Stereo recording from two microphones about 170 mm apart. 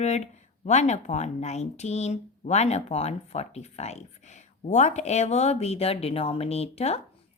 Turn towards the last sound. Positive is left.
turn(degrees=35)  # may be behind; listen again after turning